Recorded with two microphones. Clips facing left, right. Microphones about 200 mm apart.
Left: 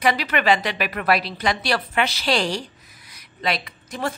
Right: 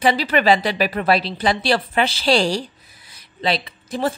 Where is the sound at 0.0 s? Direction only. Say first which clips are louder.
Right 4 dB; 30° right (ahead or behind).